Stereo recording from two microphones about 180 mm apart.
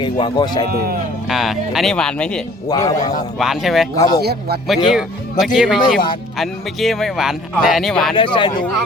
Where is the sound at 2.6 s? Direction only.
20° left (ahead or behind).